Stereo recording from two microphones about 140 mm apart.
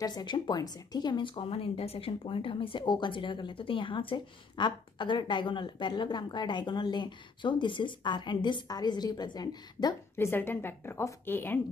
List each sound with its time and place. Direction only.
0.0 s speech: 30° left (ahead or behind)
10.1 s a woman's voice: 15° left (ahead or behind)